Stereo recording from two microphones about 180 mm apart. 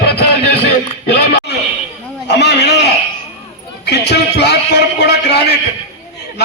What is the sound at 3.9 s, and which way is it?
A man's voice, 70° left (ahead or behind).